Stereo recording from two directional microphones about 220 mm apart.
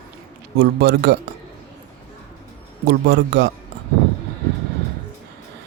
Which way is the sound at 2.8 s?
50° right (ahead or behind).